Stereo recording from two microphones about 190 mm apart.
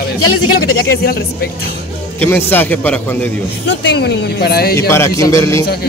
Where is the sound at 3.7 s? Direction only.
65° left (ahead or behind).